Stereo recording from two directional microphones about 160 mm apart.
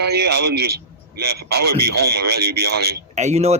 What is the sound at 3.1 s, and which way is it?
Speech, 45° right (ahead or behind).